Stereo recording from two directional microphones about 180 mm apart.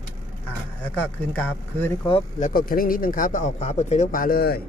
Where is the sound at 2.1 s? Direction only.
35° left (ahead or behind).